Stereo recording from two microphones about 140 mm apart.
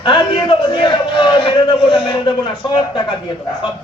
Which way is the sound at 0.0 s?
35° left (ahead or behind).